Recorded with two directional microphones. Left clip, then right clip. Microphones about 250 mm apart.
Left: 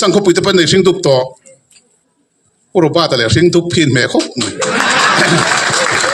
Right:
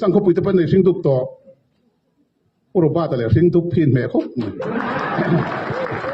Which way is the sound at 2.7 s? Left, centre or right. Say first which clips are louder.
Left 7 dB; left.